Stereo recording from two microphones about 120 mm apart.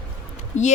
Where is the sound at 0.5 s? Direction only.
75° left (ahead or behind).